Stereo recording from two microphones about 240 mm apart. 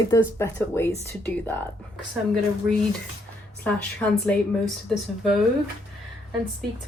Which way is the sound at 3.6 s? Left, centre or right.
Centre.